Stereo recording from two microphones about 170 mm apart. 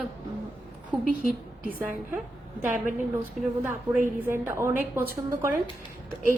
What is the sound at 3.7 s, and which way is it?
Speech, 50° right (ahead or behind).